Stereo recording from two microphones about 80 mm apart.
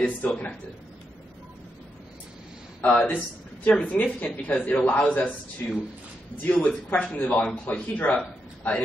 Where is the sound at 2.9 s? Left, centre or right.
Centre.